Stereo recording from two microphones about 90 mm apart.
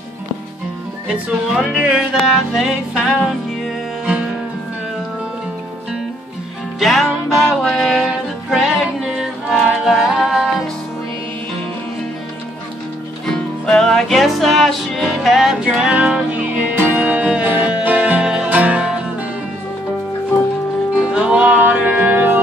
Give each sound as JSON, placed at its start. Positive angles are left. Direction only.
{"t": 1.0, "sound": "music", "side_deg": -10}
{"t": 6.8, "sound": "music", "side_deg": 0}
{"t": 13.2, "sound": "music", "side_deg": 5}
{"t": 21.1, "sound": "music", "side_deg": -15}